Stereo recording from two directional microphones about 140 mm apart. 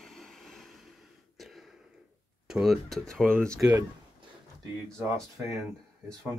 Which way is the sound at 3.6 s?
15° right (ahead or behind).